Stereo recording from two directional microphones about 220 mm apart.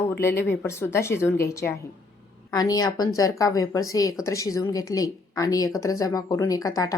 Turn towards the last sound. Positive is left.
turn(degrees=15)  # may be behind; listen again after turning